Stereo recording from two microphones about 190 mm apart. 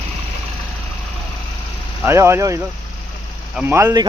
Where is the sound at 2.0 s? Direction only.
15° right (ahead or behind).